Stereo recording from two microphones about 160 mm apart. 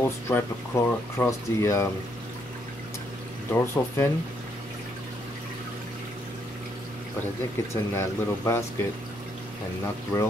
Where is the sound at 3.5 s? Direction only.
15° left (ahead or behind).